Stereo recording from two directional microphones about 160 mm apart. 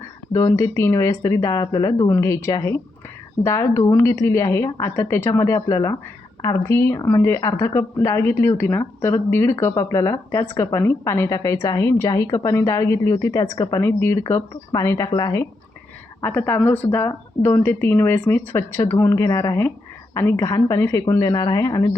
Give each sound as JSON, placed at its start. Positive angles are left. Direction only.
{"t": 0.3, "sound": "speech", "side_deg": 20}